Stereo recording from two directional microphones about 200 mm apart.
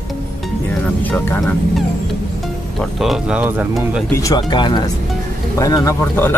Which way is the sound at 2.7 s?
Centre (ahead or behind).